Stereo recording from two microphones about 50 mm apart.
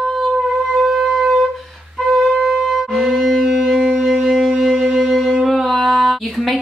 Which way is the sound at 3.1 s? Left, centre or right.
Centre.